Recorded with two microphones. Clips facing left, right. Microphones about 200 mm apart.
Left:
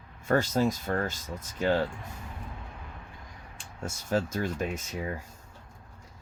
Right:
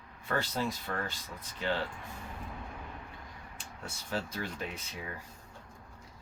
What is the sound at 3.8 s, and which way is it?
Speech, 45° left (ahead or behind).